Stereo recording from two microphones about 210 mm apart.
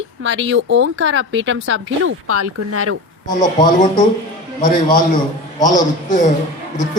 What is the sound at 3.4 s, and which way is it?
Speech, 20° left (ahead or behind).